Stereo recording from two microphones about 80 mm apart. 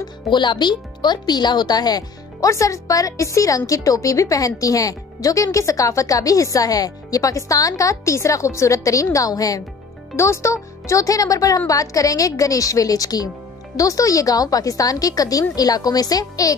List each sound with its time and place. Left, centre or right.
0.3 s speech: left
2.5 s a woman's voice: left
10.1 s a woman's voice: left